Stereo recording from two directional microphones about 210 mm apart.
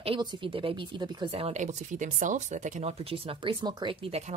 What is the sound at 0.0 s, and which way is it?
Speech, 25° right (ahead or behind).